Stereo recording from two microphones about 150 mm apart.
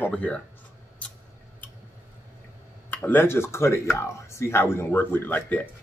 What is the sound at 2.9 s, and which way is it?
A man's voice, 15° left (ahead or behind).